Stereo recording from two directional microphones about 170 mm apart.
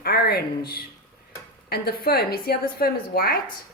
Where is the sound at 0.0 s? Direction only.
65° left (ahead or behind).